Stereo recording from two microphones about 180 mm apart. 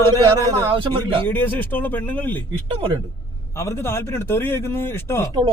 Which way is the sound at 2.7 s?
25° right (ahead or behind).